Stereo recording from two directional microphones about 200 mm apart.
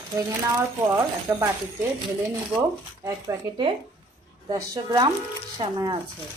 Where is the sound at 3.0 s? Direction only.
20° right (ahead or behind).